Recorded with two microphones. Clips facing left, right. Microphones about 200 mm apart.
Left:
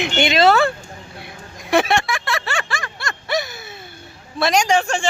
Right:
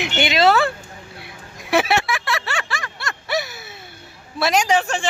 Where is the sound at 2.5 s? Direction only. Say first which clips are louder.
Left 2 dB; 50° left (ahead or behind).